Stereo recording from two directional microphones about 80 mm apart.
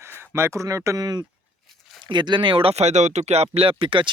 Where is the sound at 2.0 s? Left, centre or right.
Right.